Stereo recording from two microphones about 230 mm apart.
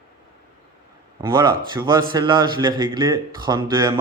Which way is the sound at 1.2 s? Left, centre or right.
Centre.